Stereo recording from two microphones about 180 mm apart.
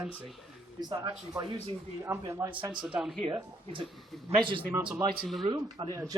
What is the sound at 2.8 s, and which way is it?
Speech, 5° right (ahead or behind).